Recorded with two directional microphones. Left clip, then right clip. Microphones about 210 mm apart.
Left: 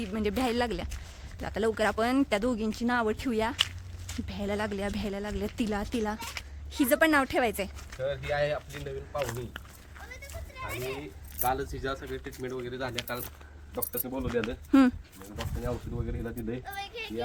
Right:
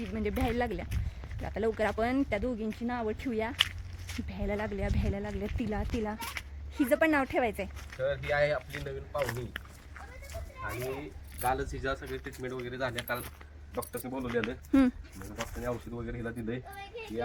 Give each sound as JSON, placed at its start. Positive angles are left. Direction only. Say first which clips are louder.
{"t": 0.1, "sound": "speech", "louder": "left 3 dB", "side_deg": 15}
{"t": 8.0, "sound": "speech", "louder": "right 1 dB", "side_deg": 0}
{"t": 11.3, "sound": "speech", "louder": "left 1 dB", "side_deg": 5}
{"t": 14.7, "sound": "speech", "louder": "left 4 dB", "side_deg": 15}
{"t": 15.4, "sound": "speech", "louder": "even", "side_deg": -5}
{"t": 16.7, "sound": "a woman's voice", "louder": "left 5 dB", "side_deg": 30}